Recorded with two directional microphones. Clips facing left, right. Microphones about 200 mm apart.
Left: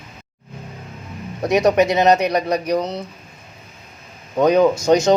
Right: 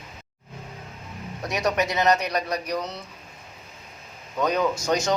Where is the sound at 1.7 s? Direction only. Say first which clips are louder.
Left 4 dB; 20° left (ahead or behind).